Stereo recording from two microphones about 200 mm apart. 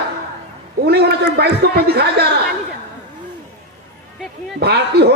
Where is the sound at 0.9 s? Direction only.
55° right (ahead or behind).